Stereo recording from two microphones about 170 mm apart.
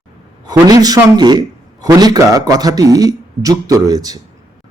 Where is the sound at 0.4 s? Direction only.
20° right (ahead or behind).